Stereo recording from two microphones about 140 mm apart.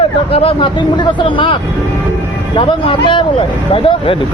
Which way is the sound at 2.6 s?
40° left (ahead or behind).